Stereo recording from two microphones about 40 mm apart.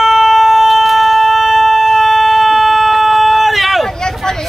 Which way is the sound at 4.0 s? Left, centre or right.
Centre.